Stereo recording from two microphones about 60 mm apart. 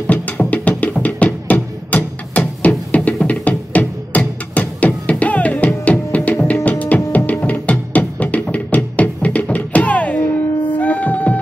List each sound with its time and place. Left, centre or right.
0.0 s music: left